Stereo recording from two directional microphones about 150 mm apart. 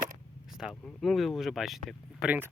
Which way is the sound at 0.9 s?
Centre (ahead or behind).